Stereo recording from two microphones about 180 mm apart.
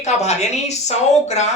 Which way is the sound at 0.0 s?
40° left (ahead or behind).